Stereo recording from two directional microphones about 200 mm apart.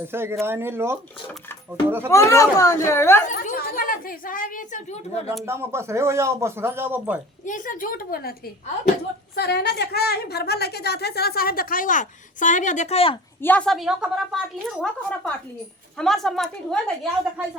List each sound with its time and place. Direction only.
0.1 s speech: 10° right (ahead or behind)
2.0 s speech: 15° left (ahead or behind)
3.2 s a woman's voice: 45° left (ahead or behind)
5.5 s speech: 15° right (ahead or behind)
7.4 s a woman's voice: 40° left (ahead or behind)
13.4 s a woman's voice: 5° left (ahead or behind)